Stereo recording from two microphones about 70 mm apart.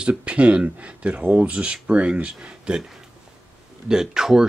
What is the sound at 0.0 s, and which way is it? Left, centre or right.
Speech, centre.